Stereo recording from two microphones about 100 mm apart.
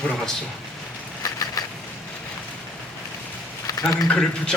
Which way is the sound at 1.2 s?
35° left (ahead or behind).